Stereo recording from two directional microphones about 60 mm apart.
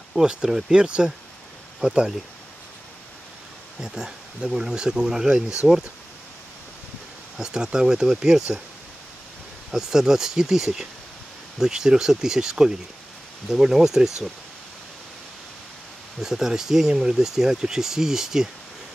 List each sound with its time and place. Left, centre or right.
0.1 s speech: centre
0.7 s speech: centre
3.8 s speech: centre
7.3 s speech: centre
9.7 s speech: centre
16.2 s speech: centre